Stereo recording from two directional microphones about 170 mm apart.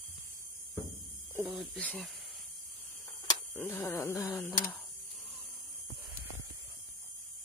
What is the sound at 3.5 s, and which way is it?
Speech, 10° left (ahead or behind).